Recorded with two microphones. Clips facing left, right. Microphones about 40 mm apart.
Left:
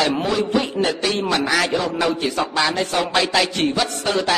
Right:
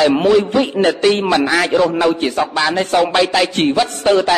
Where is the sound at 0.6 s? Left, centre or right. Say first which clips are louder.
Right 6 dB; right.